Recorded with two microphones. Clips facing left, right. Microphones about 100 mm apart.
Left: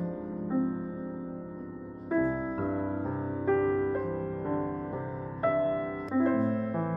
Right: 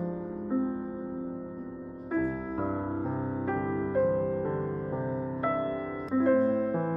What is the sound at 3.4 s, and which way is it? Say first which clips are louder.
Music: left 8 dB; 15° right (ahead or behind).